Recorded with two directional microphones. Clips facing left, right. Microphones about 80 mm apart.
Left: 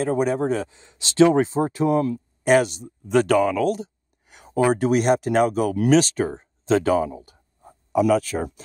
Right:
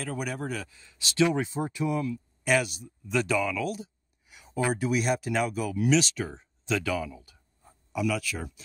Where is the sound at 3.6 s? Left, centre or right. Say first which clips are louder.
Left 10 dB; left.